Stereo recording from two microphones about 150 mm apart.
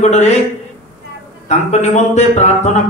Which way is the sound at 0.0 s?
50° left (ahead or behind).